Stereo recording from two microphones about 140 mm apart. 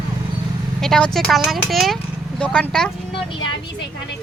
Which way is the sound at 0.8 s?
5° left (ahead or behind).